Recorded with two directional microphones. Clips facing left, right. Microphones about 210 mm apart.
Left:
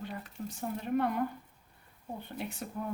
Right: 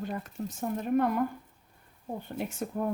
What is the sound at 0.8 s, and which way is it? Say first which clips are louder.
Speech: right 4 dB; 45° right (ahead or behind).